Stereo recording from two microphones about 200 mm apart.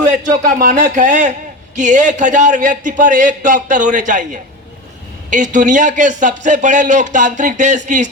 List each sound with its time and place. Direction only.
0.6 s speech: 40° right (ahead or behind)